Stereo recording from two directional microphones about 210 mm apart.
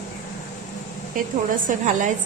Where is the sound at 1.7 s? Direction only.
35° right (ahead or behind).